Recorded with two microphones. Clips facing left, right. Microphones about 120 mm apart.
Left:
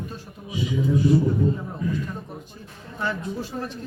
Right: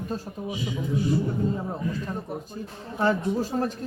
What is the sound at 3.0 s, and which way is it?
Speech, 40° right (ahead or behind).